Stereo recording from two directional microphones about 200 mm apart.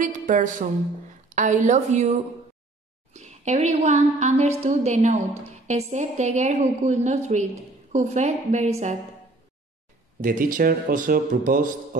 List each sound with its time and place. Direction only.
0.0 s a woman's voice: 40° right (ahead or behind)
10.2 s a man's voice: 45° right (ahead or behind)